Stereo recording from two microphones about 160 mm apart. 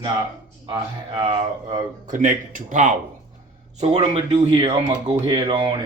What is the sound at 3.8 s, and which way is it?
Speech, 45° right (ahead or behind).